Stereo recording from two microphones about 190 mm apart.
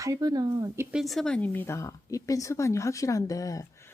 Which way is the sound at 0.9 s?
Centre (ahead or behind).